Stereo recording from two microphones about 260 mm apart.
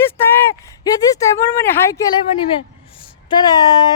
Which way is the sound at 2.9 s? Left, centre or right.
Centre.